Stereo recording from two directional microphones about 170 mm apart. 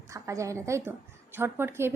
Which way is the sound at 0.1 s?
20° right (ahead or behind).